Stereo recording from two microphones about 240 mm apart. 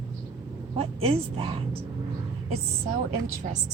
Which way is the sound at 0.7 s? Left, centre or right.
Right.